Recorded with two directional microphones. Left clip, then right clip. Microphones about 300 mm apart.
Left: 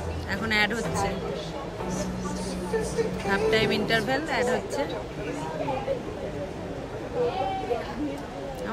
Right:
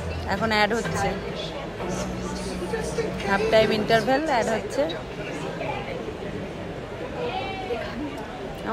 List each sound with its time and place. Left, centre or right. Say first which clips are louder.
0.3 s a woman's voice: right 3 dB; centre
3.3 s a woman's voice: right 5 dB; centre